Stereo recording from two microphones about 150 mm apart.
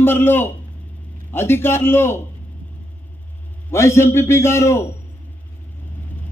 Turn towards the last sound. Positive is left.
turn(degrees=20)  # may be behind; listen again after turning